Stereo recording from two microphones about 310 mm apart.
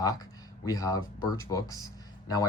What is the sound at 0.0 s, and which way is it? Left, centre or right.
Speech, centre.